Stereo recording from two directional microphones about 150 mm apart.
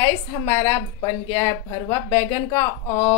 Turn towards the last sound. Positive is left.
turn(degrees=15)  # may be behind; listen again after turning